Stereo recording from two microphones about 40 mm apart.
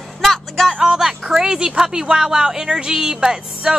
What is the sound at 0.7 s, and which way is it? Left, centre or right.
Speech, centre.